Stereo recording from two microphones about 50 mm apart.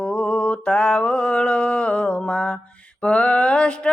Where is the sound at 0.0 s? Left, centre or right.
Centre.